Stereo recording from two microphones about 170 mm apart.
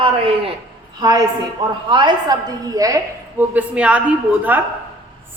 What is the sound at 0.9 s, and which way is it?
A woman's voice, 20° right (ahead or behind).